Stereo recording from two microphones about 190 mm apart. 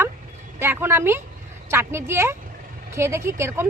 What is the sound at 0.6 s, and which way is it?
Speech, 10° right (ahead or behind).